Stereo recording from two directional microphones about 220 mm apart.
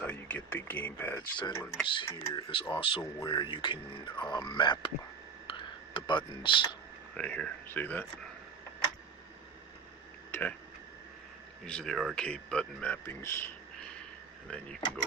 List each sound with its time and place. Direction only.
0.0 s speech: 5° left (ahead or behind)
1.4 s speech: 20° left (ahead or behind)
5.5 s a sound: 20° left (ahead or behind)
7.1 s speech: 5° left (ahead or behind)
10.3 s a sound: 10° left (ahead or behind)
11.6 s speech: 5° left (ahead or behind)
14.5 s speech: 5° left (ahead or behind)